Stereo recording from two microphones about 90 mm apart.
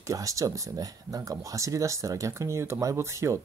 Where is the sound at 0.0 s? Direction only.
40° right (ahead or behind).